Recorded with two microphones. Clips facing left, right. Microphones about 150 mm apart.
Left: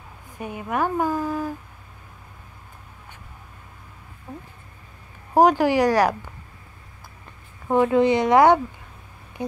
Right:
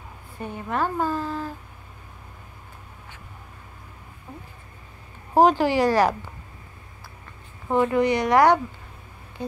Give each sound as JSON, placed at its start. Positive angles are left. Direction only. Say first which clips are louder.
{"t": 0.4, "sound": "a woman's voice", "louder": "left 1 dB", "side_deg": 10}
{"t": 5.3, "sound": "a woman's voice", "louder": "left 1 dB", "side_deg": 15}
{"t": 7.6, "sound": "speech", "louder": "left 3 dB", "side_deg": 15}